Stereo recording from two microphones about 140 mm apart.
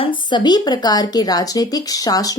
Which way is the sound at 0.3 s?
30° left (ahead or behind).